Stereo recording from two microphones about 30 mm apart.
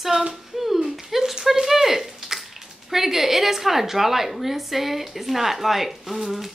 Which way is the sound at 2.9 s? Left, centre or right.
Centre.